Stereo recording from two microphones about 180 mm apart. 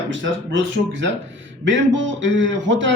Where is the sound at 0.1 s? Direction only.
90° right.